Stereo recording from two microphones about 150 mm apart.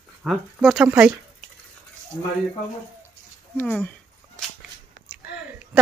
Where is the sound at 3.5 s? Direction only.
10° left (ahead or behind).